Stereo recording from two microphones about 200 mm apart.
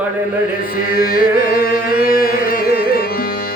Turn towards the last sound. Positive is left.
turn(degrees=45)  # may be behind; listen again after turning